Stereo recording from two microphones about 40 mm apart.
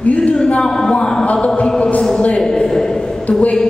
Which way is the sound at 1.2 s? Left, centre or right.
Left.